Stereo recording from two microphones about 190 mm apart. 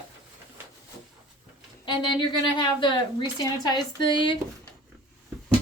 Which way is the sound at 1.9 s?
25° left (ahead or behind).